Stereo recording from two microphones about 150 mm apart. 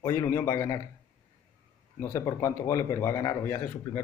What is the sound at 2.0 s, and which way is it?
A man's voice, 20° left (ahead or behind).